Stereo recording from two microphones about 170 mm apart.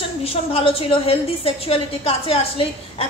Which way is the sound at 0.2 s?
35° left (ahead or behind).